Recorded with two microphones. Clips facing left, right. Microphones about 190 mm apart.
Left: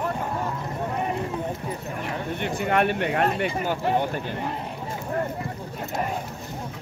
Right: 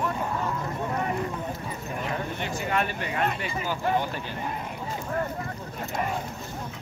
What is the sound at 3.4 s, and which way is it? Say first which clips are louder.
Speech: left 5 dB; 60° left (ahead or behind).